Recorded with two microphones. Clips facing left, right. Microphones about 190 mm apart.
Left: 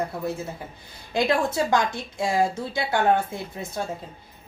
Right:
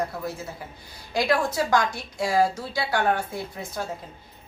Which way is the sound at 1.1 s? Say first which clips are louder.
Left 1 dB; 25° left (ahead or behind).